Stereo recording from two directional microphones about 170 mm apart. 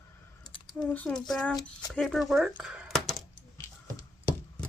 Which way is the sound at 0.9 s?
5° left (ahead or behind).